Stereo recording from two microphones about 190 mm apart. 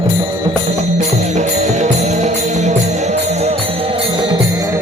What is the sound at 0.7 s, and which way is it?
Music, 35° right (ahead or behind).